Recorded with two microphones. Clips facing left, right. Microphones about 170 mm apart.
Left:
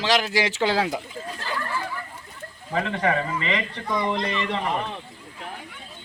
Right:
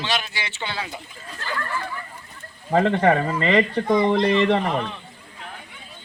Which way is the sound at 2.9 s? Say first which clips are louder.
Right 5 dB; 45° right (ahead or behind).